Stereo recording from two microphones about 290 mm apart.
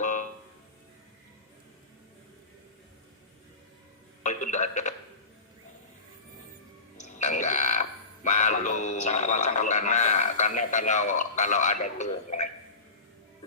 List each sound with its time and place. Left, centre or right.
0.0 s music: left
4.2 s speech: left
6.9 s speech: left